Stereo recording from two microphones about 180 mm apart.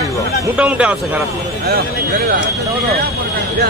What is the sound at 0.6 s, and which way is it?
Speech, 5° right (ahead or behind).